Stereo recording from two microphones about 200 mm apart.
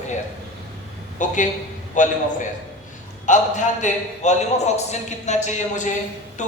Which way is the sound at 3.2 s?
40° left (ahead or behind).